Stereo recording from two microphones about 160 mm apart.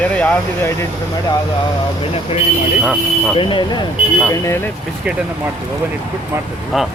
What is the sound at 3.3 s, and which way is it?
Speech, 30° left (ahead or behind).